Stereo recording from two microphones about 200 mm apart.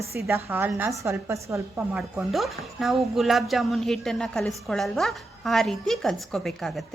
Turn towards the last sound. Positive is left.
turn(degrees=0)  # may be behind; listen again after turning